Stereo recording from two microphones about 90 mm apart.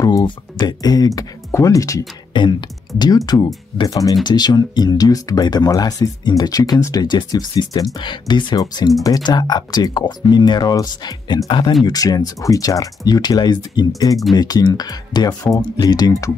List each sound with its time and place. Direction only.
0.0 s speech: 50° left (ahead or behind)
3.0 s speech: 50° left (ahead or behind)
8.0 s speech: 60° left (ahead or behind)